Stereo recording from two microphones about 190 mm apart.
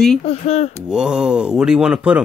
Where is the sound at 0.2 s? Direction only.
30° left (ahead or behind).